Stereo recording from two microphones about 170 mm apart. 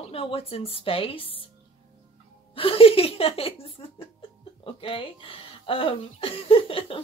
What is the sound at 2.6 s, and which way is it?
Speech, 35° left (ahead or behind).